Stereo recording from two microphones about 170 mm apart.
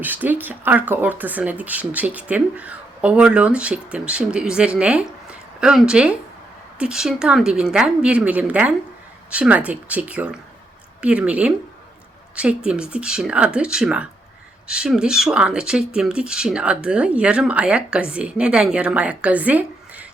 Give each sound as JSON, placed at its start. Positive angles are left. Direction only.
{"t": 0.0, "sound": "speech", "side_deg": -10}